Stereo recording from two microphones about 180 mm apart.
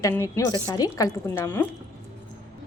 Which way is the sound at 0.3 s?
20° left (ahead or behind).